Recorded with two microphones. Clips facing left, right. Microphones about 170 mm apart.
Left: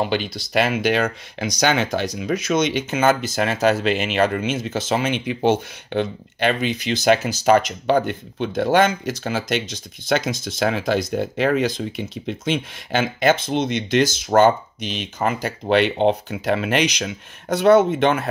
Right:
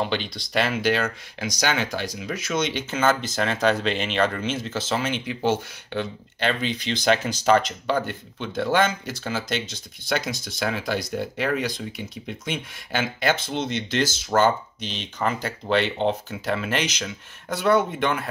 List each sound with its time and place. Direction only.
0.0 s speech: 10° left (ahead or behind)